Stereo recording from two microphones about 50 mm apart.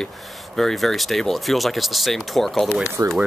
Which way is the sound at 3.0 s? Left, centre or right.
Right.